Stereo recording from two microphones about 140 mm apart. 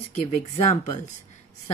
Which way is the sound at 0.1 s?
50° left (ahead or behind).